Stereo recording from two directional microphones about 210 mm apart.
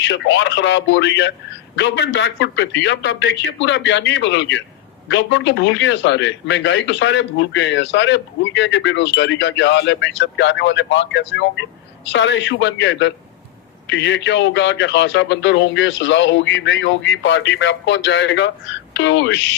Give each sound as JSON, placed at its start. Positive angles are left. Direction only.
{"t": 0.0, "sound": "speech", "side_deg": 60}